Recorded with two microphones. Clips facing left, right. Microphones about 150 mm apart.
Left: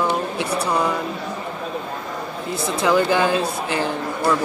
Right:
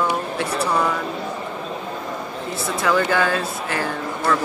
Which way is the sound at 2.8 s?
20° left (ahead or behind).